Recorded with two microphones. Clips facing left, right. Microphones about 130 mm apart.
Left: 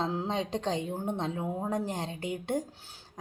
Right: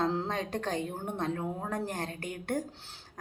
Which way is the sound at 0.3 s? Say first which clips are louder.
Left 2 dB; 20° left (ahead or behind).